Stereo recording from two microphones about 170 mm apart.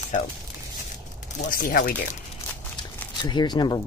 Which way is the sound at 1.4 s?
55° left (ahead or behind).